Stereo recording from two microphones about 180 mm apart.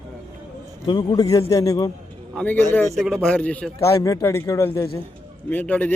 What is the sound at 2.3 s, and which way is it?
Speech, 5° left (ahead or behind).